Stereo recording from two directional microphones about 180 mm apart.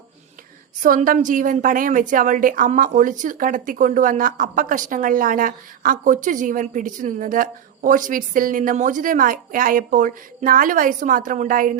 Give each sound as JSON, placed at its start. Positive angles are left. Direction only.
{"t": 0.8, "sound": "a woman's voice", "side_deg": -45}